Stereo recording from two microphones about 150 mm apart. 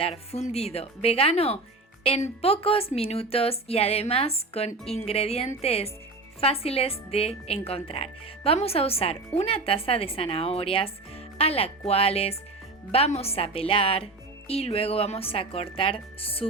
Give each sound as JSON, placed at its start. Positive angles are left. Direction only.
{"t": 0.0, "sound": "a woman's voice", "side_deg": 45}